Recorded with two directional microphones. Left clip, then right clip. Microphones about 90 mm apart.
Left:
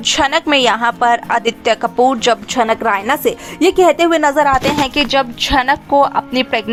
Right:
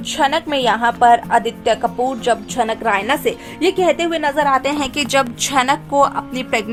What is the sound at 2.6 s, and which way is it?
A woman's voice, 50° left (ahead or behind).